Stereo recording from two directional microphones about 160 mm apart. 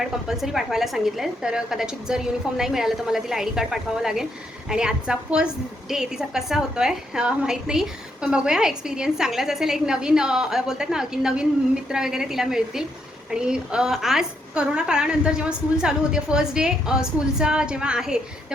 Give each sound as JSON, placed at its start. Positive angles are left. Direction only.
{"t": 0.0, "sound": "a woman's voice", "side_deg": 0}